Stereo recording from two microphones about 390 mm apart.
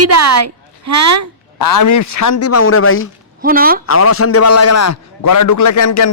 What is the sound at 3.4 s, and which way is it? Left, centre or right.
Speech, right.